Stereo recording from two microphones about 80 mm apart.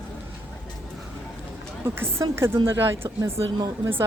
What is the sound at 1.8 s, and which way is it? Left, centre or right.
Speech, right.